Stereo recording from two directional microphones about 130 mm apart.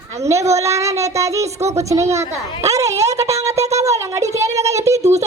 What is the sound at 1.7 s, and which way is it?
Speech, 25° right (ahead or behind).